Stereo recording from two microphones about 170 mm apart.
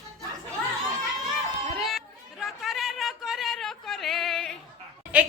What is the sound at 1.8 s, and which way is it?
Chatter, centre (ahead or behind).